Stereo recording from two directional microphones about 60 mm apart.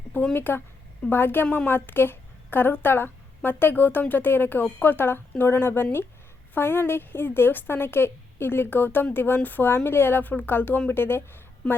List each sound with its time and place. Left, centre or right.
0.3 s a woman's voice: left